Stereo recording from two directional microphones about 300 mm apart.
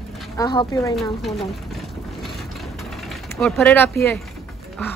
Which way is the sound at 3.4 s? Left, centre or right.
Centre.